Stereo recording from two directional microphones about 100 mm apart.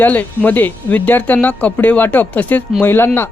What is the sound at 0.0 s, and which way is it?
Speech, 15° left (ahead or behind).